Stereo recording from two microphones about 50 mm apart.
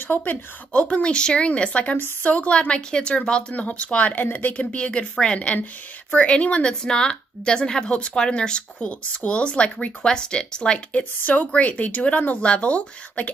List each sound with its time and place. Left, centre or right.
0.1 s speech: left
0.8 s speech: left
4.6 s speech: left